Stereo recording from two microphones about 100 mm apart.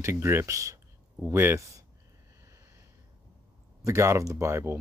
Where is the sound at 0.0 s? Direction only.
25° right (ahead or behind).